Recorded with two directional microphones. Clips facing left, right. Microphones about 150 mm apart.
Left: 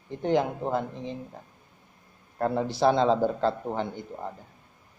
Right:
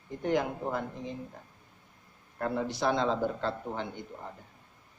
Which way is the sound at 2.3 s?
35° left (ahead or behind).